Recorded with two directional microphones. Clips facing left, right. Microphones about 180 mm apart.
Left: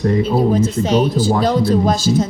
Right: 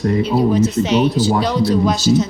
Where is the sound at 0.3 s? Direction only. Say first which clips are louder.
Even; 50° left (ahead or behind).